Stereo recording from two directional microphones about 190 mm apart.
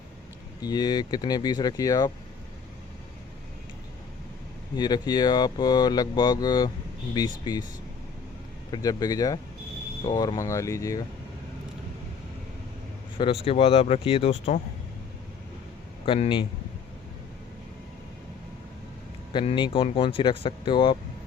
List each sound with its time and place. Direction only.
0.6 s speech: 20° left (ahead or behind)
4.8 s speech: 20° left (ahead or behind)
8.7 s speech: 20° left (ahead or behind)
13.1 s speech: 30° left (ahead or behind)
16.0 s speech: 25° left (ahead or behind)
19.3 s speech: 25° left (ahead or behind)